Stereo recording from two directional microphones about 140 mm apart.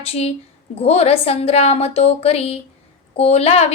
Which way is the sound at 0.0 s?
45° left (ahead or behind).